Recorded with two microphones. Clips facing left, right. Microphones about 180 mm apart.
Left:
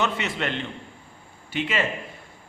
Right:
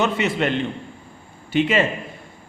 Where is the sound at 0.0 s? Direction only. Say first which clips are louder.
Right 6 dB; 10° right (ahead or behind).